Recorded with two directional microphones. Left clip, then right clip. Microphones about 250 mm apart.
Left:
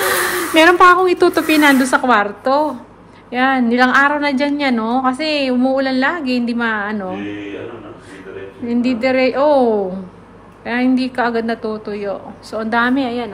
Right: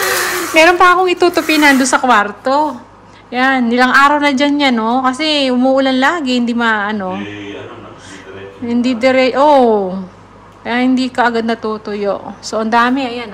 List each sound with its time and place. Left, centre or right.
0.0 s a woman's voice: centre
8.6 s a woman's voice: centre